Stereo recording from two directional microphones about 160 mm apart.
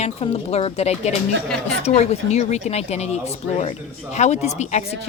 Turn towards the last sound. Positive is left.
turn(degrees=45)  # may be behind; listen again after turning